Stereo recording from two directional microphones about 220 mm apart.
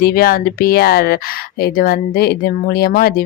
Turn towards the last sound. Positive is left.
turn(degrees=40)  # may be behind; listen again after turning